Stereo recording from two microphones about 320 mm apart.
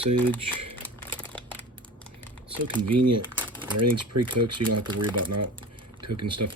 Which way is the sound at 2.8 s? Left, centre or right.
Right.